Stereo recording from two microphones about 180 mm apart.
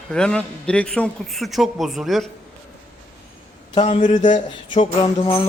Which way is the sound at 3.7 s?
40° left (ahead or behind).